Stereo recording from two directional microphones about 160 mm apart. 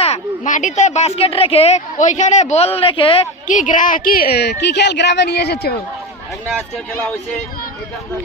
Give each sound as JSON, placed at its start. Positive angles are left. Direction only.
{"t": 0.0, "sound": "a woman's voice", "side_deg": 45}
{"t": 3.4, "sound": "a woman's voice", "side_deg": 55}